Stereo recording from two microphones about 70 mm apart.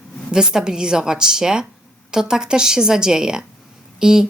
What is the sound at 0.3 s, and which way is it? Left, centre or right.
Speech, centre.